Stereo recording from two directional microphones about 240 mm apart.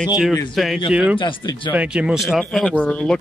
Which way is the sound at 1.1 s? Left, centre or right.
Centre.